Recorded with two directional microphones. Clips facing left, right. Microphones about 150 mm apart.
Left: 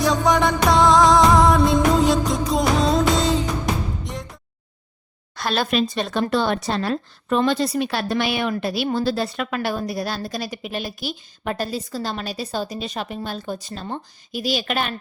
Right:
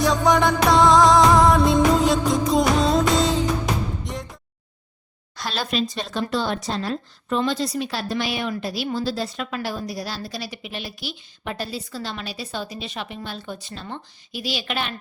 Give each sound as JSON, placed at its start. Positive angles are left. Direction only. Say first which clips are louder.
{"t": 0.0, "sound": "music", "louder": "even", "side_deg": 0}
{"t": 5.3, "sound": "speech", "louder": "left 5 dB", "side_deg": 55}